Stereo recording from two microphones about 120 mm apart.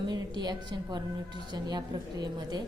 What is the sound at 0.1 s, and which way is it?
A woman's voice, 35° right (ahead or behind).